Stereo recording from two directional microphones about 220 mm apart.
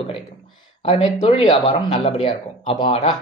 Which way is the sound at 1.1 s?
25° left (ahead or behind).